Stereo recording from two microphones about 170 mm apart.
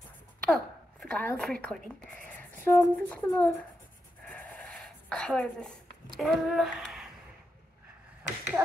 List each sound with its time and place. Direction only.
0.5 s a woman's voice: 5° left (ahead or behind)
4.3 s a sound: 5° left (ahead or behind)
6.1 s speech: centre (ahead or behind)
8.6 s speech: 10° right (ahead or behind)